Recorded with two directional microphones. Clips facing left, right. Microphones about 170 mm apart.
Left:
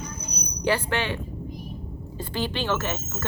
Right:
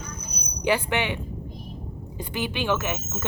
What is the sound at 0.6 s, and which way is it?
Speech, 15° right (ahead or behind).